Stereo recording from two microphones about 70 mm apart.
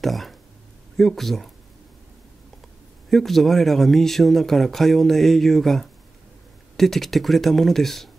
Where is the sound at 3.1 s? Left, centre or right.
Centre.